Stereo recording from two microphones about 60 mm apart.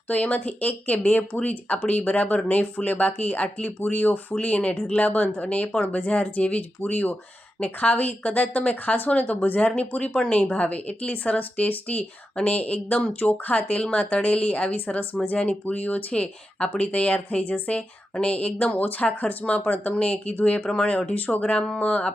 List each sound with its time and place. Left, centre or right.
0.1 s speech: left